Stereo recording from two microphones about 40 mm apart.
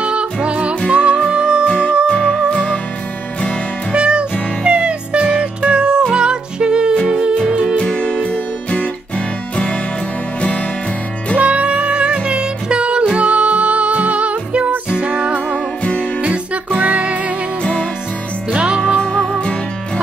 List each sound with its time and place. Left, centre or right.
0.0 s music: right
2.1 s music: centre
2.5 s music: left
3.9 s music: right
7.9 s music: left
11.3 s music: right
15.5 s music: left
16.8 s music: right
18.5 s music: right